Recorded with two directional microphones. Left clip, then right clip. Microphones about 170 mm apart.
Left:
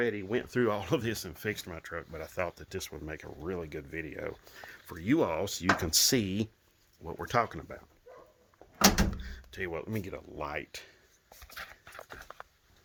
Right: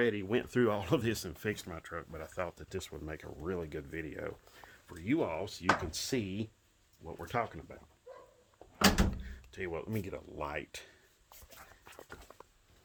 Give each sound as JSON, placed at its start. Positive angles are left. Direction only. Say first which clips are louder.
{"t": 0.0, "sound": "speech", "louder": "even", "side_deg": -10}
{"t": 2.6, "sound": "speech", "louder": "left 2 dB", "side_deg": 5}
{"t": 4.9, "sound": "speech", "louder": "left 5 dB", "side_deg": 65}
{"t": 7.0, "sound": "speech", "louder": "left 6 dB", "side_deg": 50}
{"t": 9.5, "sound": "speech", "louder": "left 3 dB", "side_deg": 15}